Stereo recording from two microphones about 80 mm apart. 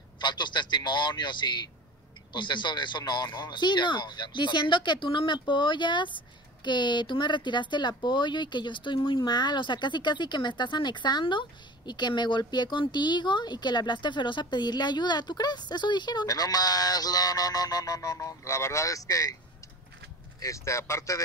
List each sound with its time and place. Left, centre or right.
0.2 s a sound: left
2.3 s speech: left
20.3 s speech: left